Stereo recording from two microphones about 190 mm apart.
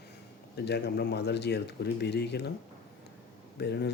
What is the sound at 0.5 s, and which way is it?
A man's voice, 60° left (ahead or behind).